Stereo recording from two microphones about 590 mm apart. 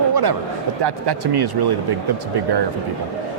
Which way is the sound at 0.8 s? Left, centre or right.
Right.